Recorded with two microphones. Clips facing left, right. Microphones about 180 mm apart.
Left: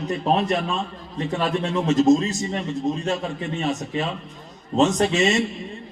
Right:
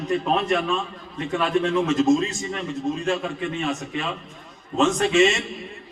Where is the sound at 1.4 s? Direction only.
35° left (ahead or behind).